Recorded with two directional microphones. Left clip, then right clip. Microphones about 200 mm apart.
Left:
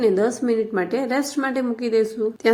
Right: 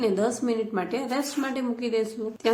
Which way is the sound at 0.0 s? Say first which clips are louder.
Left 6 dB; 20° left (ahead or behind).